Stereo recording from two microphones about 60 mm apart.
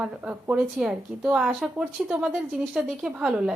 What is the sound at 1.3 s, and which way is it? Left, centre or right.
Speech, centre.